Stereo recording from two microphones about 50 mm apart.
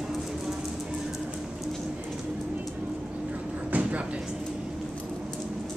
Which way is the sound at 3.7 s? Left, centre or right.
Right.